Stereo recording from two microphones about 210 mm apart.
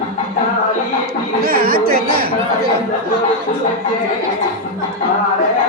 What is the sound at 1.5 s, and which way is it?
Chatter, 45° right (ahead or behind).